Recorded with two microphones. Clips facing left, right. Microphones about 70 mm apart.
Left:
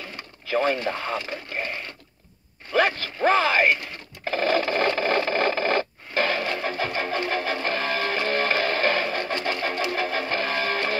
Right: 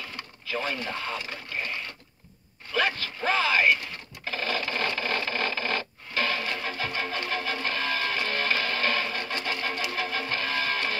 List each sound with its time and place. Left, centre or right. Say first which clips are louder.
0.5 s speech: left 8 dB; left
2.7 s speech: left 5 dB; left
4.2 s sewing machine: left 8 dB; left